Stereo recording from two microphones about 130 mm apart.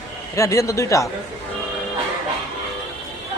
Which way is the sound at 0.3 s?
25° left (ahead or behind).